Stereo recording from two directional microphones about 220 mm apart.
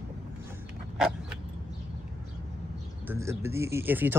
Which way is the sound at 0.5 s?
5° right (ahead or behind).